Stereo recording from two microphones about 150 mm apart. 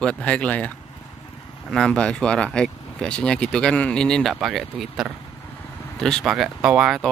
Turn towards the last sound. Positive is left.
turn(degrees=-5)  # may be behind; listen again after turning